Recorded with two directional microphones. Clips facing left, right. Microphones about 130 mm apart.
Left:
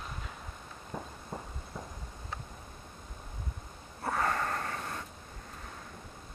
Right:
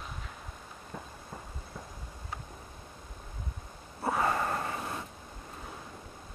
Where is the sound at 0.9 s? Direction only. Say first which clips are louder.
Left 3 dB; 20° left (ahead or behind).